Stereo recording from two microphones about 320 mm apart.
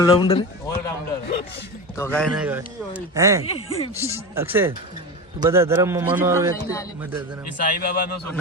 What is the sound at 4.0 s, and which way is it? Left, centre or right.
A man's voice, centre.